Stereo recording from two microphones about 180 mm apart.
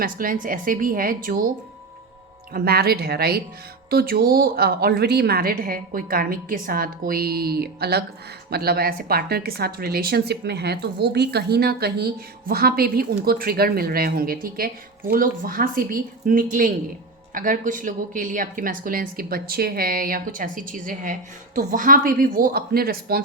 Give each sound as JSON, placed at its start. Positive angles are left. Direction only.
{"t": 0.0, "sound": "a woman's voice", "side_deg": -50}
{"t": 2.5, "sound": "a woman's voice", "side_deg": -55}